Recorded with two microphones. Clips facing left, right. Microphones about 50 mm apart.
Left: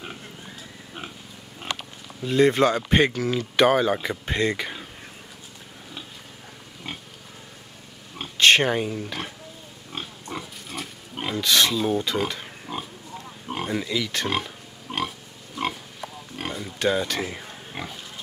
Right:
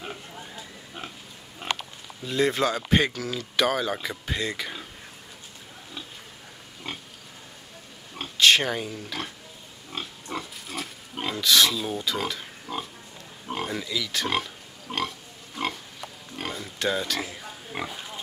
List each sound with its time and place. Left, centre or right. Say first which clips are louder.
2.2 s speech: left 5 dB; centre
4.3 s speech: left 6 dB; left
4.6 s speech: left 2 dB; centre
6.8 s pig: even; centre
8.4 s speech: left 3 dB; left
10.3 s pig: right 1 dB; centre
13.5 s speech: left 3 dB; centre
14.2 s pig: left 1 dB; centre
16.3 s a sound: left 2 dB; centre
17.7 s pig: right 2 dB; centre